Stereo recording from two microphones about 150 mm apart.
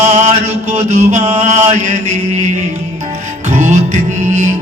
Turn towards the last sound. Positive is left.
turn(degrees=-50)  # may be behind; listen again after turning